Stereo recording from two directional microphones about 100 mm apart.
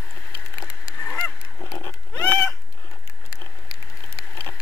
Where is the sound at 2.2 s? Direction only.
25° left (ahead or behind).